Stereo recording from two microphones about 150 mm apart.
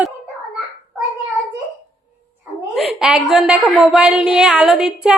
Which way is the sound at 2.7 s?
Centre (ahead or behind).